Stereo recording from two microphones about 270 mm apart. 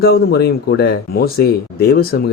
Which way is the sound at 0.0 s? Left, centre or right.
Left.